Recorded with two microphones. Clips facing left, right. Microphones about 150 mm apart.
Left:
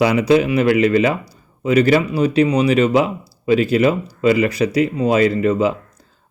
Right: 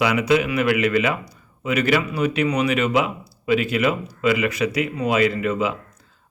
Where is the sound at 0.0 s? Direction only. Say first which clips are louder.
Left 5 dB; 35° left (ahead or behind).